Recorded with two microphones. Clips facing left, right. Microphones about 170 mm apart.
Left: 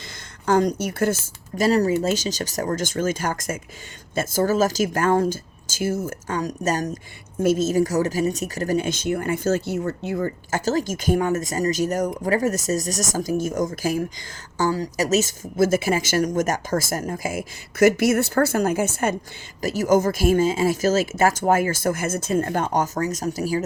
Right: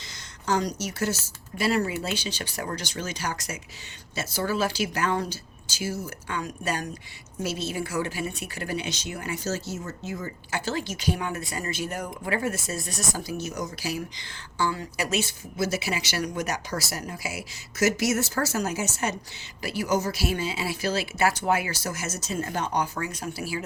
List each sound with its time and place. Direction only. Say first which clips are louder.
0.4 s speech: left 7 dB; 55° left (ahead or behind)
10.5 s speech: left 6 dB; 45° left (ahead or behind)